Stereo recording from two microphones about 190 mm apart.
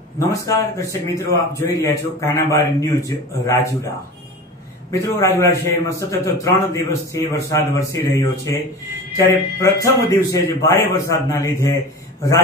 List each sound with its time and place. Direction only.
0.3 s a man's voice: 15° left (ahead or behind)
4.9 s a man's voice: 15° left (ahead or behind)